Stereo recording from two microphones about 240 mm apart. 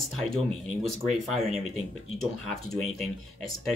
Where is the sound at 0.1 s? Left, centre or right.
Centre.